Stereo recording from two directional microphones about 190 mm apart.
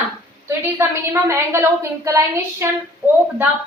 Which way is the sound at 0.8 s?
15° right (ahead or behind).